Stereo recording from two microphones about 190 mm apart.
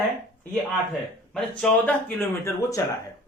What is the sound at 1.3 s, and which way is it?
Speech, 5° left (ahead or behind).